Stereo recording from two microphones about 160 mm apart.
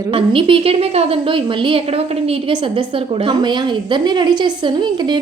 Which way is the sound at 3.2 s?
30° right (ahead or behind).